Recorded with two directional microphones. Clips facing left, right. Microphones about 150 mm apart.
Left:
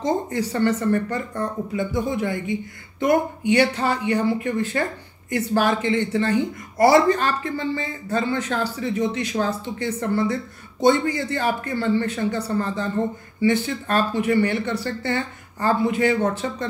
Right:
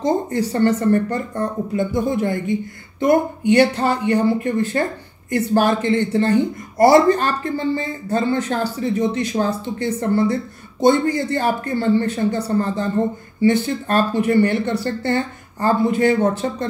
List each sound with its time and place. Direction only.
0.3 s speech: 40° right (ahead or behind)
3.5 s speech: 45° right (ahead or behind)